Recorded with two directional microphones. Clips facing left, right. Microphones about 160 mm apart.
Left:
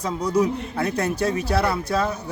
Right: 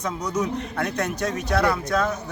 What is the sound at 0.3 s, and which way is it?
A man's voice, 30° left (ahead or behind).